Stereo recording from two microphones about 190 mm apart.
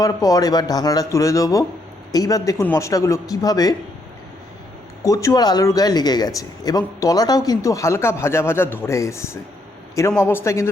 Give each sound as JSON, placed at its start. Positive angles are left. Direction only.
{"t": 0.0, "sound": "speech", "side_deg": 20}
{"t": 5.0, "sound": "speech", "side_deg": 20}